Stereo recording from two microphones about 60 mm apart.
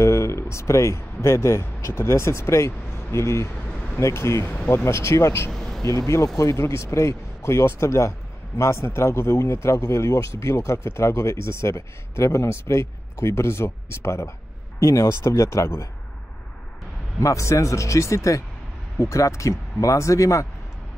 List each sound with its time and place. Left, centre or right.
0.0 s speech: left
3.6 s a sound: left
3.9 s a man's voice: left
5.5 s a sound: centre
5.9 s a man's voice: left
17.2 s speech: left